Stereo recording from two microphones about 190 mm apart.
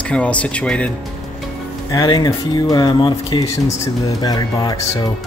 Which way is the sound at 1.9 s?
20° left (ahead or behind).